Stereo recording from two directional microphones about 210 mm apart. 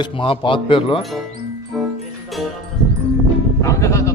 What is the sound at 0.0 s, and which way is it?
A man's voice, 25° left (ahead or behind).